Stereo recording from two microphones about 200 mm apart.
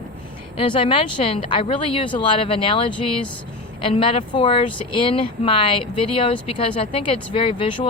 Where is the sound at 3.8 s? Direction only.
25° left (ahead or behind).